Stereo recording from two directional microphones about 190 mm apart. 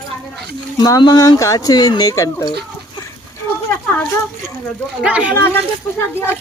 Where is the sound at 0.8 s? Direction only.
20° left (ahead or behind).